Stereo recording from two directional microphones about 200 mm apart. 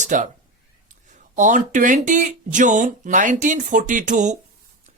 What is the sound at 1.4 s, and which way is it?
Speech, 40° right (ahead or behind).